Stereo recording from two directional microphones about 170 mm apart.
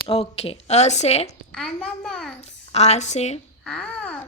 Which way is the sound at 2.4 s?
40° left (ahead or behind).